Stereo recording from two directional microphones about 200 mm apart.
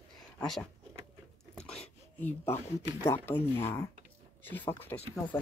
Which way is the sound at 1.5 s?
5° left (ahead or behind).